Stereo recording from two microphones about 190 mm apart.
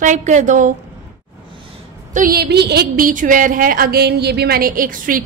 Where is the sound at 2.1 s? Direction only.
50° right (ahead or behind).